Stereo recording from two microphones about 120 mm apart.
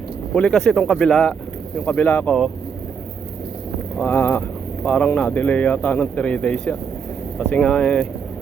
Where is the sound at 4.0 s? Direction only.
20° left (ahead or behind).